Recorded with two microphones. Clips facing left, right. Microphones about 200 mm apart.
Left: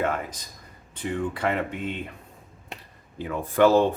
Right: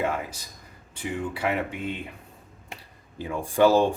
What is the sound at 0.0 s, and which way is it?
A man's voice, 10° right (ahead or behind).